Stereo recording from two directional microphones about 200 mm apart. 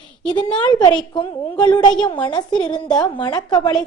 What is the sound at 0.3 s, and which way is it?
Speech, 25° left (ahead or behind).